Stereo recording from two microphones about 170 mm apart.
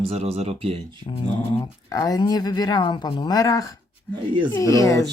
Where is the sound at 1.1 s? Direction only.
25° left (ahead or behind).